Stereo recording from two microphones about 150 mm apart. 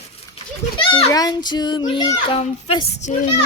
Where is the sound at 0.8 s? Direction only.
35° left (ahead or behind).